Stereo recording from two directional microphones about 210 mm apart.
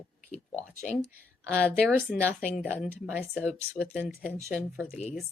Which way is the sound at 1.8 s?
10° right (ahead or behind).